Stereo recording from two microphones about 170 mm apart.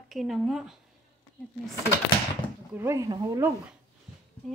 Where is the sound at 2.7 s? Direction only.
15° right (ahead or behind).